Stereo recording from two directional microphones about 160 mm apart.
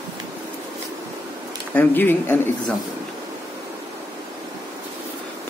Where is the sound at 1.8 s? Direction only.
10° left (ahead or behind).